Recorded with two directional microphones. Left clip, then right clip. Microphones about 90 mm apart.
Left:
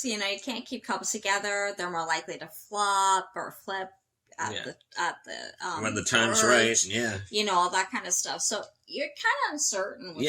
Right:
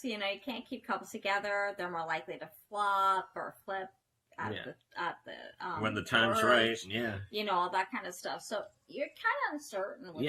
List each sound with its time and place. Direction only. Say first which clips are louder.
0.0 s a woman's voice: left 6 dB; 25° left (ahead or behind)
4.9 s a woman's voice: left 7 dB; 30° left (ahead or behind)
5.8 s speech: left 4 dB; 40° right (ahead or behind)
6.5 s speech: left 5 dB; 20° right (ahead or behind)
7.3 s a woman's voice: left 7 dB; 25° left (ahead or behind)